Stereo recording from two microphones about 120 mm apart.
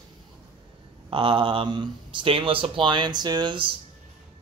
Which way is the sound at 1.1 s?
45° right (ahead or behind).